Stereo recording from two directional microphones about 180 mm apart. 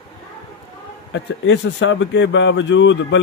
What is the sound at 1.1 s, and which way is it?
Speech, 90° left.